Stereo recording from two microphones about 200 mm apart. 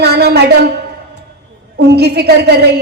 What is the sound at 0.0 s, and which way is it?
Speech, 55° right (ahead or behind).